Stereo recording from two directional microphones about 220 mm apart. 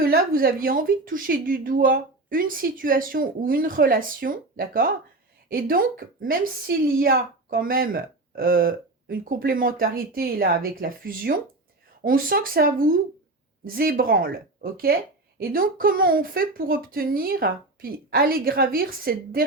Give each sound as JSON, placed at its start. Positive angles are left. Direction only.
{"t": 0.0, "sound": "a woman's voice", "side_deg": -40}